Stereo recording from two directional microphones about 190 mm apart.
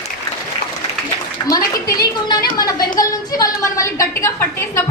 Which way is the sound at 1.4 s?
20° left (ahead or behind).